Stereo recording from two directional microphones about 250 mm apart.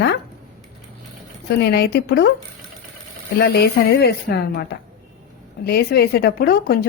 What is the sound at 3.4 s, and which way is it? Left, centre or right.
Speech, left.